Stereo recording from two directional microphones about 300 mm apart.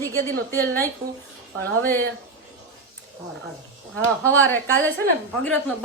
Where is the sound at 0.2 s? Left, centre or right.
Centre.